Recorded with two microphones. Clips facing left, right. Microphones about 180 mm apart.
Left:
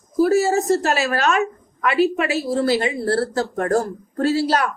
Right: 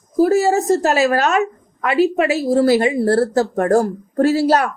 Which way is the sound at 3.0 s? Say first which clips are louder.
Right 5 dB; 45° right (ahead or behind).